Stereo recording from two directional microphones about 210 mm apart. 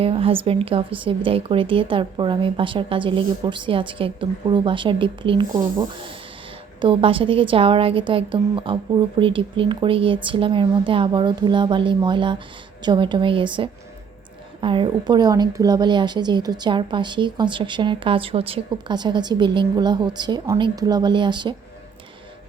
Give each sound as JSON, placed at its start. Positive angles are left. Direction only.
{"t": 0.0, "sound": "speech", "side_deg": -25}